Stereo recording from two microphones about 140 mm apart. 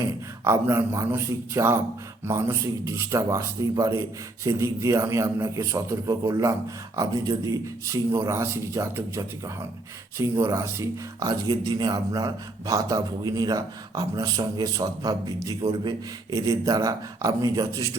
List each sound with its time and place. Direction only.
0.0 s speech: 20° right (ahead or behind)